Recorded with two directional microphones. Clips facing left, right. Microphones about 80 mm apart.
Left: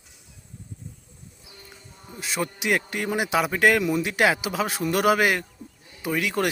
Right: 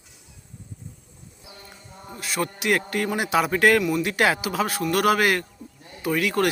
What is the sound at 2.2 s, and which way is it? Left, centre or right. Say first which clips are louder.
A man's voice: right 1 dB; centre.